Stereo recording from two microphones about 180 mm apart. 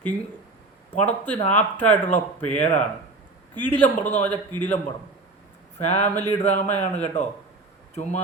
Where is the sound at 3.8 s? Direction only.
10° left (ahead or behind).